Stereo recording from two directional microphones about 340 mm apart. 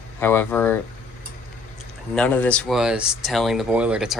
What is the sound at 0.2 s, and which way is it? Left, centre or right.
Speech, centre.